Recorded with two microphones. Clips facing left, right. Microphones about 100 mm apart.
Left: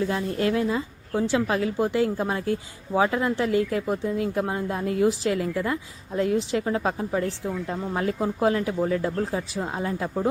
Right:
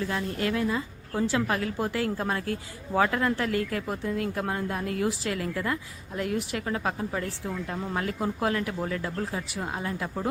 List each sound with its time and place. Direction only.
0.0 s speech: 25° left (ahead or behind)